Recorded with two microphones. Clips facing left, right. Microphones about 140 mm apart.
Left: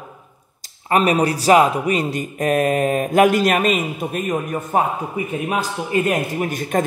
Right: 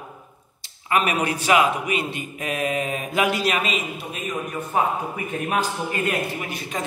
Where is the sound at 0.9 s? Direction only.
35° left (ahead or behind).